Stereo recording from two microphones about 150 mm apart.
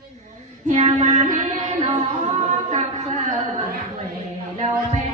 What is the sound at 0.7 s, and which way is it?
Child singing, 50° right (ahead or behind).